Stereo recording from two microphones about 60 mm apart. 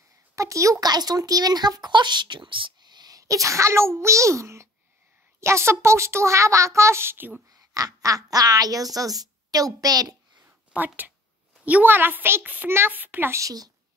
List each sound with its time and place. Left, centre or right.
0.4 s speech: right
3.1 s a child's voice: right
7.7 s speech: right
10.7 s a woman's voice: right
13.3 s a woman's voice: right